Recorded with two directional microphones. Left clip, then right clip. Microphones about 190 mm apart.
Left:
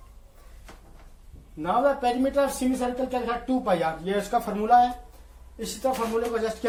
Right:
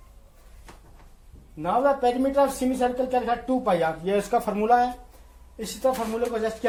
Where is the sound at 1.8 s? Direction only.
30° right (ahead or behind).